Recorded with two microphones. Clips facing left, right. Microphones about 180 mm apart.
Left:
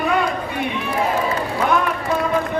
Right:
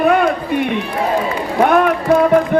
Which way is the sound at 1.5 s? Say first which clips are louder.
Right 10 dB; 60° right (ahead or behind).